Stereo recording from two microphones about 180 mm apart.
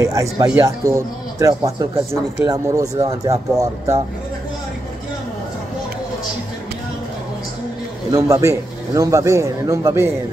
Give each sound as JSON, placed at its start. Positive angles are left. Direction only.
{"t": 0.0, "sound": "speech", "side_deg": -15}
{"t": 8.1, "sound": "speech", "side_deg": -15}